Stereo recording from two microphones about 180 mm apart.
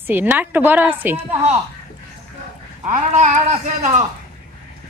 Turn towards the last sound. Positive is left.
turn(degrees=-40)  # may be behind; listen again after turning